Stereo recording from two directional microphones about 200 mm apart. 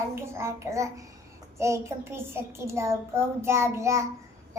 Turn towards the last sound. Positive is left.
turn(degrees=-15)  # may be behind; listen again after turning